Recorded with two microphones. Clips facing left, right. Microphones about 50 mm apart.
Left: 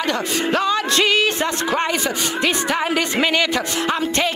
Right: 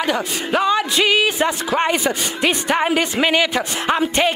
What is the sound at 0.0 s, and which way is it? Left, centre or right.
Speech, centre.